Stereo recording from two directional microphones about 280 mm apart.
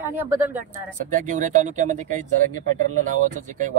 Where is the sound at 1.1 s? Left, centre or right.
Right.